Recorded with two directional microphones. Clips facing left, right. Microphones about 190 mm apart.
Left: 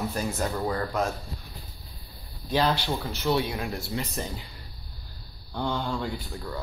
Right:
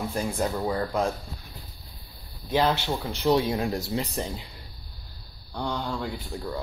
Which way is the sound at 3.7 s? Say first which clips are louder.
Right 4 dB; 35° right (ahead or behind).